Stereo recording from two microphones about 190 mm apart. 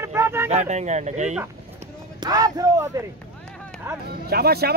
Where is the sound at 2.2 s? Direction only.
20° right (ahead or behind).